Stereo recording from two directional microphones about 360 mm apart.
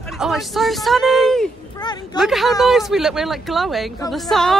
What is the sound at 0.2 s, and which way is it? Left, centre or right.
A woman's voice, centre.